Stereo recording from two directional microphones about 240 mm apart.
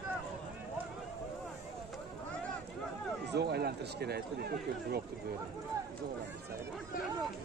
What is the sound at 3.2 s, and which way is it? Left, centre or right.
Speech, right.